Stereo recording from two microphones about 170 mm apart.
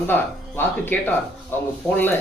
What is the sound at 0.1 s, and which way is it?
Speech, 10° left (ahead or behind).